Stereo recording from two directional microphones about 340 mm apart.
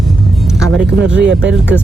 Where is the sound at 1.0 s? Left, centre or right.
Right.